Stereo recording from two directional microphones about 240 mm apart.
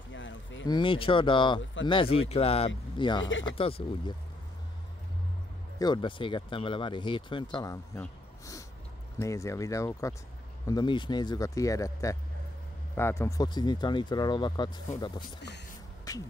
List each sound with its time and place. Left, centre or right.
0.1 s a sound: left
0.7 s speech: centre
5.8 s speech: centre
16.1 s beatboxing: centre